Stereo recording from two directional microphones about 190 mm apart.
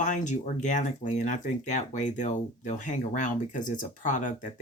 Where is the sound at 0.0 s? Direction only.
40° left (ahead or behind).